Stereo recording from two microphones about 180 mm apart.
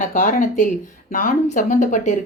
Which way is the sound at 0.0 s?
45° left (ahead or behind).